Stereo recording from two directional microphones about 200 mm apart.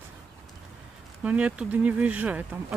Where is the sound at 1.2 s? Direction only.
5° right (ahead or behind).